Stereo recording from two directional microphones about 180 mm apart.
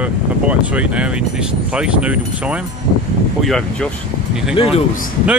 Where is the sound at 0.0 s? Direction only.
10° right (ahead or behind).